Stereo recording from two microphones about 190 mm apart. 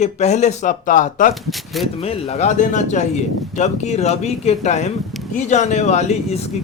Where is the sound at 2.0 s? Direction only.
30° left (ahead or behind).